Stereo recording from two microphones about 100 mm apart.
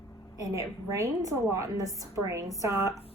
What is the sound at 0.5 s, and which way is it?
A woman's voice, 30° right (ahead or behind).